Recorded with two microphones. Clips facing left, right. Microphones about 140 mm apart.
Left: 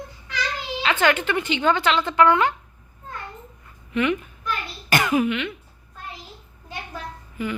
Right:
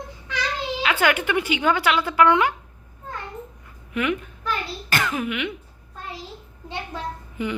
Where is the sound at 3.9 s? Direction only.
5° right (ahead or behind).